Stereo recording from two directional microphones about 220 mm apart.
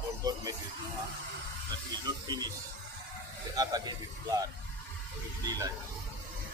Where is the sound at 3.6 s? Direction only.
15° right (ahead or behind).